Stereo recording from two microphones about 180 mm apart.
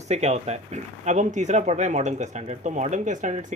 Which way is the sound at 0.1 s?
40° right (ahead or behind).